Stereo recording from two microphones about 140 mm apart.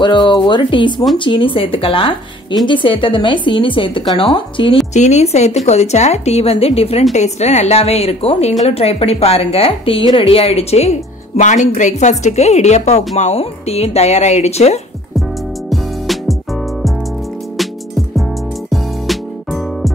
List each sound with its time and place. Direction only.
0.0 s a woman's voice: 35° left (ahead or behind)
4.9 s a woman's voice: 55° left (ahead or behind)
15.7 s music: centre (ahead or behind)
17.6 s music: centre (ahead or behind)